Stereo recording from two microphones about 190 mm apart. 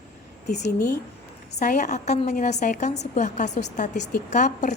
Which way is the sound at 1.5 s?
40° left (ahead or behind).